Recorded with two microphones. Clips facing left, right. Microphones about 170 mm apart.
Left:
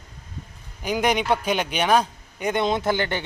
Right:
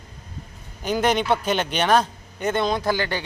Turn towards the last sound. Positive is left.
turn(degrees=20)  # may be behind; listen again after turning